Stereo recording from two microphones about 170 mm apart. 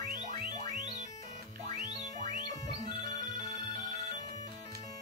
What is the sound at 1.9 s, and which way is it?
Music, 20° left (ahead or behind).